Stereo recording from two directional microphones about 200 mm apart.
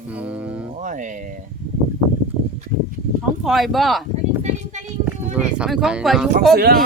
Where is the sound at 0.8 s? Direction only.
40° right (ahead or behind).